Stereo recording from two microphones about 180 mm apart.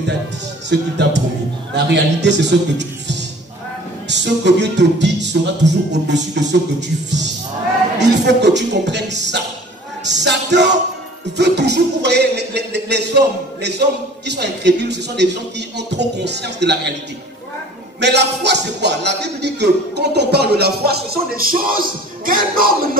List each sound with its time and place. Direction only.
0.7 s speech: 75° right (ahead or behind)
8.0 s speech: 75° right (ahead or behind)
10.0 s music: 75° right (ahead or behind)
11.3 s speech: 70° right (ahead or behind)
18.0 s speech: 70° right (ahead or behind); by 22.8 s 55° right (ahead or behind)